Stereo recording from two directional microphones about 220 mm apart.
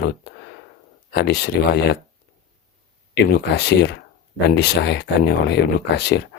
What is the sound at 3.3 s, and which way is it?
Speech, 50° left (ahead or behind).